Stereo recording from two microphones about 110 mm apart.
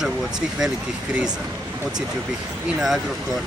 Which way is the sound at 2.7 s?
5° right (ahead or behind).